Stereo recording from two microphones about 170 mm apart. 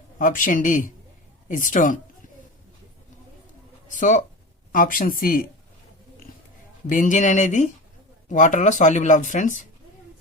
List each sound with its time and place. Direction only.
0.2 s speech: 50° left (ahead or behind)
3.8 s speech: 50° left (ahead or behind)
6.8 s speech: 50° left (ahead or behind)